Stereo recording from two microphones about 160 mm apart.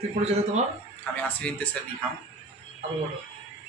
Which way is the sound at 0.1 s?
45° right (ahead or behind).